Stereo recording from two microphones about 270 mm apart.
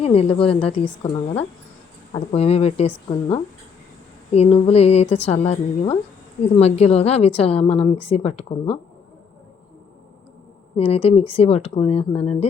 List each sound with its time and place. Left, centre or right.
0.0 s a woman's voice: left
4.4 s a woman's voice: left
10.8 s a woman's voice: left